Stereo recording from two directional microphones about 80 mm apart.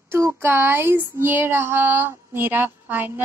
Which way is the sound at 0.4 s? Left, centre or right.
Right.